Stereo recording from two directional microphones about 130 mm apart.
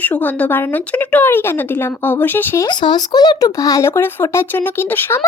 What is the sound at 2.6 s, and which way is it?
Speech, 35° left (ahead or behind).